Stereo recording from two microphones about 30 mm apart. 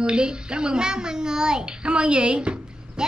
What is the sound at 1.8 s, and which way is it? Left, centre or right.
A woman's voice, right.